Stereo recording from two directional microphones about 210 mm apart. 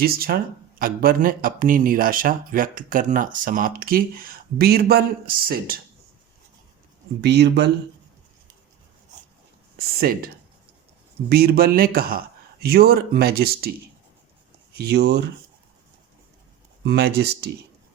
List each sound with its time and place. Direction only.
0.0 s speech: 45° right (ahead or behind)
7.2 s speech: 55° right (ahead or behind)
9.7 s speech: 45° right (ahead or behind)
14.7 s speech: 50° right (ahead or behind)
16.8 s speech: 50° right (ahead or behind)